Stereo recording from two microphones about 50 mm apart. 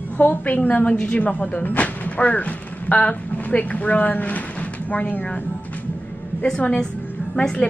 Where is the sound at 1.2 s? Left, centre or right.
Left.